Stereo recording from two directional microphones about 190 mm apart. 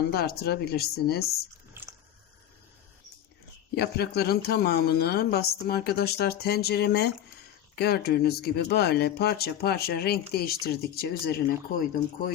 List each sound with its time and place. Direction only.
0.1 s speech: 55° left (ahead or behind)
1.7 s a sound: 10° right (ahead or behind)
3.8 s speech: 55° left (ahead or behind)